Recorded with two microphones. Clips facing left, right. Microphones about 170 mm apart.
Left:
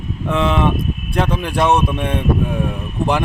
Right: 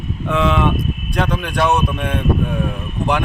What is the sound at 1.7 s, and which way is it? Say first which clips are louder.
Speech: left 2 dB; 30° left (ahead or behind).